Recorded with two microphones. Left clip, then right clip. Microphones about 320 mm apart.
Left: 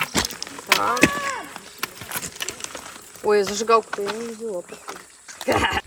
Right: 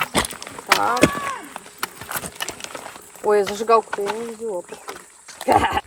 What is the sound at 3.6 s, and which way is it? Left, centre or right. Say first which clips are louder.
Speech: right 2 dB; centre.